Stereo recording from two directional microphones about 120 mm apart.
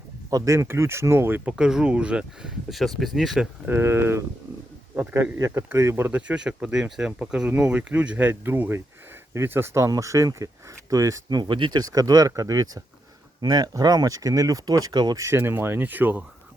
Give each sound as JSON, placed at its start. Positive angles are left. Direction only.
{"t": 0.3, "sound": "speech", "side_deg": -30}
{"t": 3.7, "sound": "speech", "side_deg": -20}
{"t": 5.5, "sound": "speech", "side_deg": -20}
{"t": 15.2, "sound": "speech", "side_deg": -20}